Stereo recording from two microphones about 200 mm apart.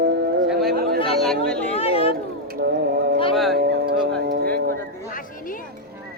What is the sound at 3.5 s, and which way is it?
Music, 55° right (ahead or behind).